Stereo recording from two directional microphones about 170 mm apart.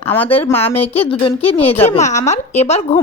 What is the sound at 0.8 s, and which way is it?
A woman's voice, 35° left (ahead or behind).